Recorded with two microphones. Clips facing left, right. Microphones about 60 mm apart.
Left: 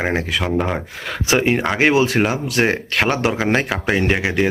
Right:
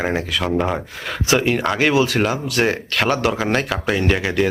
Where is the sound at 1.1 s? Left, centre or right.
Left.